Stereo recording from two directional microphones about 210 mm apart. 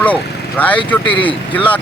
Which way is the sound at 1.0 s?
25° left (ahead or behind).